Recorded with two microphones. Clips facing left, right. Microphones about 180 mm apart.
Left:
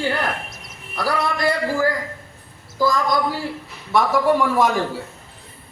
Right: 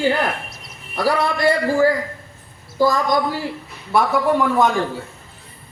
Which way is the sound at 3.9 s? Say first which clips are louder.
Even; centre (ahead or behind).